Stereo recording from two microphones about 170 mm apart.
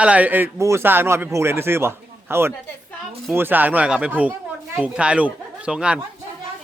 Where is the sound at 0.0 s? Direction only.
10° right (ahead or behind).